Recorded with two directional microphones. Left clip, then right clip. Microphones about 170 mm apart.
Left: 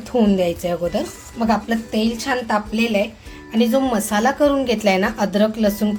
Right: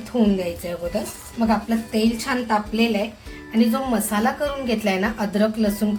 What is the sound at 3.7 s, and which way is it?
A woman's voice, 45° left (ahead or behind).